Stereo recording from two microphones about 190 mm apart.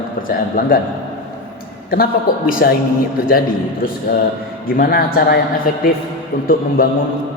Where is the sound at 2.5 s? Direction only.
50° left (ahead or behind).